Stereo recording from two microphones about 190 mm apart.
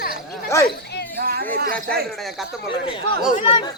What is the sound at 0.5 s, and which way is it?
Speech, 15° left (ahead or behind).